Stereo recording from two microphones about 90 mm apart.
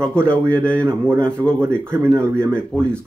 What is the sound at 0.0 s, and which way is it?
Speech, 10° left (ahead or behind).